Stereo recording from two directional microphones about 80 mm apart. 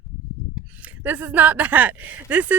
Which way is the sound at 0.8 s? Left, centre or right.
Right.